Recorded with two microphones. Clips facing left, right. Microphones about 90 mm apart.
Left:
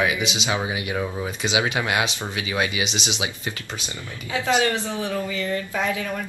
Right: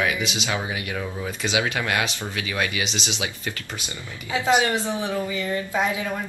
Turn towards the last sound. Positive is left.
turn(degrees=-20)  # may be behind; listen again after turning